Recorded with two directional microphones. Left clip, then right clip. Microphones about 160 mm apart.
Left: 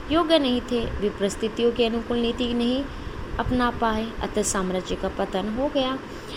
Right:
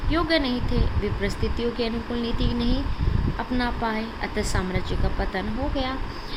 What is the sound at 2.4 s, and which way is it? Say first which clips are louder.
Speech: left 3 dB; 55° left (ahead or behind).